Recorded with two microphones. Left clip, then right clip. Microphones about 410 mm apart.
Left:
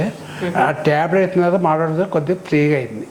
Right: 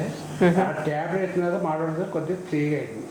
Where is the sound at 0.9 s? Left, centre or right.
Left.